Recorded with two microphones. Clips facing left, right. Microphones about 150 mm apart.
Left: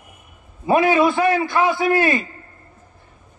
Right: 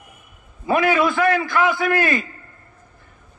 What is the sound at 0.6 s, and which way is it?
A man's voice, 25° left (ahead or behind).